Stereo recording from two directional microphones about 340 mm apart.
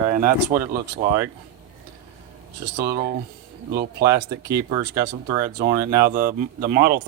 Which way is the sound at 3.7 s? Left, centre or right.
Right.